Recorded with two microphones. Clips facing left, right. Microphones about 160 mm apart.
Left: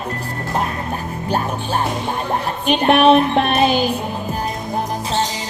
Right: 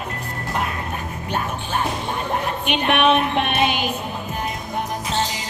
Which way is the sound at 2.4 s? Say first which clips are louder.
Left 9 dB; 35° left (ahead or behind).